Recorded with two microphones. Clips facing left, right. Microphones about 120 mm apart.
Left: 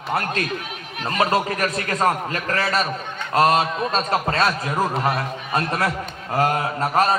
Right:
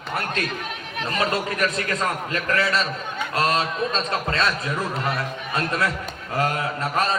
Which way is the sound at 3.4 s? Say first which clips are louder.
Left 5 dB; 45° left (ahead or behind).